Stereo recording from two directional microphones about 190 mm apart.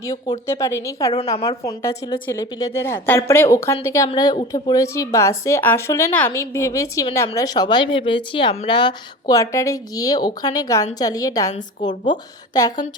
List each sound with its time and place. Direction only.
0.4 s a woman's voice: 15° left (ahead or behind)